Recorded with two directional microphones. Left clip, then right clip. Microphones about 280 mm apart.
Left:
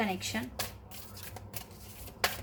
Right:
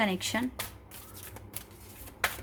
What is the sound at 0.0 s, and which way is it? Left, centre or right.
Speech, right.